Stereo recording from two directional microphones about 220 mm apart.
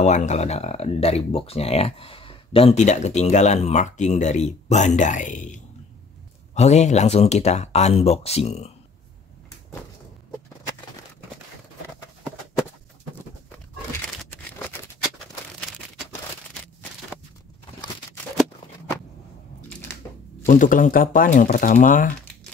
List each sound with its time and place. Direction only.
0.0 s speech: 30° left (ahead or behind)
20.4 s speech: 35° left (ahead or behind)